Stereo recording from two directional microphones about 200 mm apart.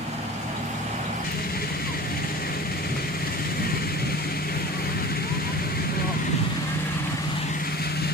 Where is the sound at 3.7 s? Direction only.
50° left (ahead or behind).